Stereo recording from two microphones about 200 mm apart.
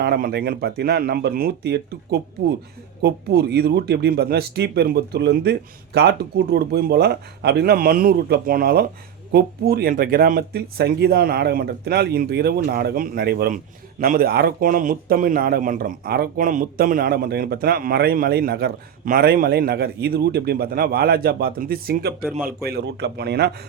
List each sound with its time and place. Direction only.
0.0 s speech: 50° right (ahead or behind)
22.2 s speech: 5° right (ahead or behind)
22.4 s speech: 50° right (ahead or behind)